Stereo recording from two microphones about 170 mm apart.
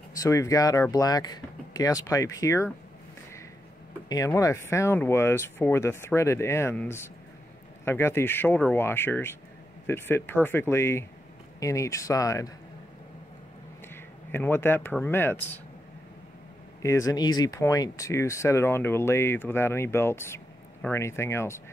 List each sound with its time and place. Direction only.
0.2 s speech: 20° left (ahead or behind)
4.1 s speech: 20° left (ahead or behind)
13.9 s speech: 15° left (ahead or behind)
16.8 s speech: 20° left (ahead or behind)